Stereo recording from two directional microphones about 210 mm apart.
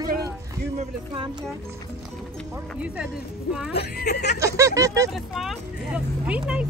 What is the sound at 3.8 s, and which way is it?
Speech, 50° left (ahead or behind).